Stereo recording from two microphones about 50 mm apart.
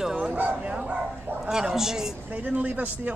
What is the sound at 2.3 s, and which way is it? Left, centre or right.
Speech, right.